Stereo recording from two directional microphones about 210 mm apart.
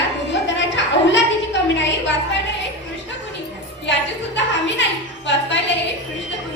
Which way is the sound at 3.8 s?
60° left (ahead or behind).